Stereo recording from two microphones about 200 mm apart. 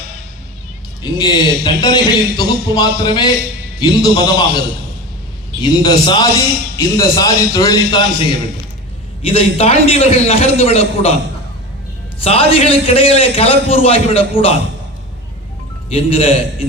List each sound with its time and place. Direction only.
1.0 s a man's voice: 20° left (ahead or behind)
5.6 s a man's voice: 20° left (ahead or behind)
12.2 s a man's voice: 30° left (ahead or behind)
15.9 s a man's voice: 30° left (ahead or behind)